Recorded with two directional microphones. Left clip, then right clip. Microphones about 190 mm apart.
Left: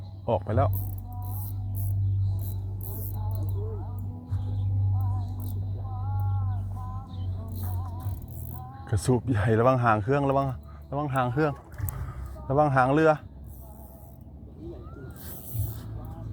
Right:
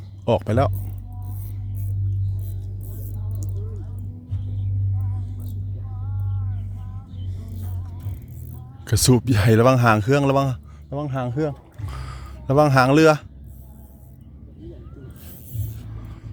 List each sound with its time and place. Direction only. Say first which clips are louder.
0.3 s speech: right 6 dB; 65° right (ahead or behind)
8.8 s speech: right 8 dB; 60° right (ahead or behind)
10.8 s speech: even; 45° right (ahead or behind)
11.9 s a sound: right 5 dB; 60° right (ahead or behind)